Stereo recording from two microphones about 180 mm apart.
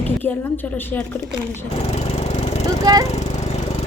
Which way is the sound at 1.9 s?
35° left (ahead or behind).